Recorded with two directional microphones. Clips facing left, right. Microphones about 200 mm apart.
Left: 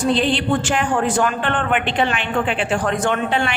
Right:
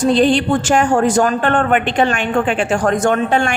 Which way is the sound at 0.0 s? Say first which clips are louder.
Right 6 dB; 45° right (ahead or behind).